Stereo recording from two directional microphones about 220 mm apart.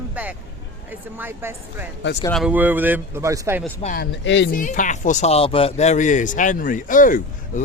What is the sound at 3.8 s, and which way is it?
Speech, 45° left (ahead or behind).